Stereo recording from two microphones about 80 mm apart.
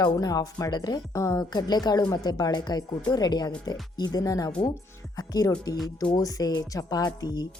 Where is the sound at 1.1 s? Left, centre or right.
Left.